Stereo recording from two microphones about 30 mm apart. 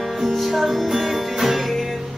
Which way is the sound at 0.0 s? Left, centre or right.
Centre.